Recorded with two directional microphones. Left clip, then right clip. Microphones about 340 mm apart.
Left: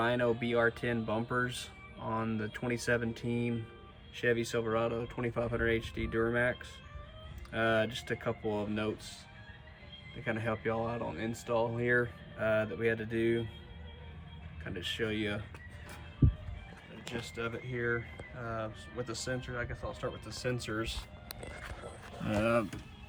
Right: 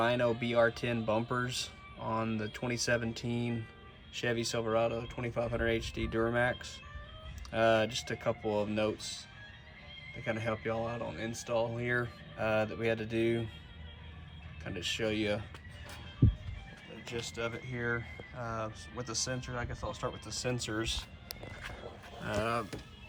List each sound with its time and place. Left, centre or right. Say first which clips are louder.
0.0 s speech: right 1 dB; centre
10.2 s speech: left 1 dB; centre
14.6 s speech: right 1 dB; centre
17.1 s speech: right 1 dB; centre